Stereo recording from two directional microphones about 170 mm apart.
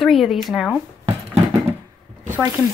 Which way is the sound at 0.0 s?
Centre (ahead or behind).